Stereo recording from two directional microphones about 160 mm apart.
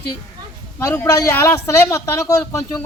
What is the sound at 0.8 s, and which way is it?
Speech, 20° left (ahead or behind).